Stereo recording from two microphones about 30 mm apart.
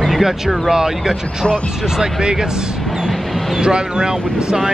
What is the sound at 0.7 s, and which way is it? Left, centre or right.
Speech, centre.